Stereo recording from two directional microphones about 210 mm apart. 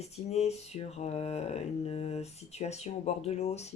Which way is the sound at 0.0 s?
30° left (ahead or behind).